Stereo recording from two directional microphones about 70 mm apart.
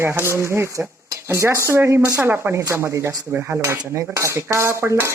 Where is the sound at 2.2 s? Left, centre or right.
Right.